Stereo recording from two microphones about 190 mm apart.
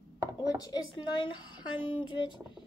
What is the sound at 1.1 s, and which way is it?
Speech, 25° left (ahead or behind).